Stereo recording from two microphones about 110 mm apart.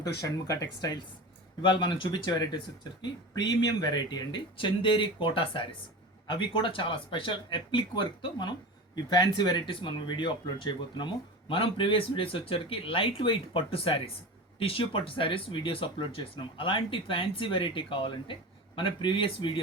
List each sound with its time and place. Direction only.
0.0 s speech: 30° left (ahead or behind); by 19.5 s 50° left (ahead or behind)